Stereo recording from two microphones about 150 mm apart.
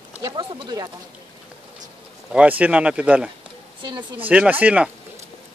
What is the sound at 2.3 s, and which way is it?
Speech, 10° right (ahead or behind).